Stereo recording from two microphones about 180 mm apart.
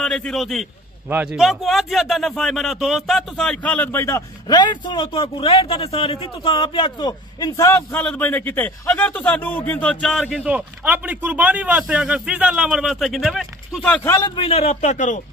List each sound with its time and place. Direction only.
0.0 s a man's voice: 5° left (ahead or behind)
14.3 s speech: 30° left (ahead or behind)